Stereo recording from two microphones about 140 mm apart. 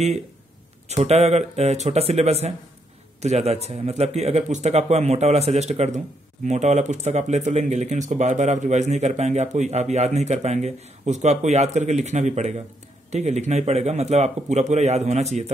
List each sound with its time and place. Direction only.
0.8 s speech: 50° right (ahead or behind)